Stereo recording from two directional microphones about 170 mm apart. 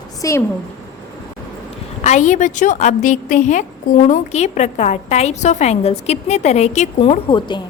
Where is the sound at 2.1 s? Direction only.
45° left (ahead or behind).